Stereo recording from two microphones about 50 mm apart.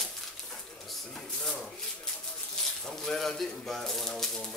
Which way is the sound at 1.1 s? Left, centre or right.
Centre.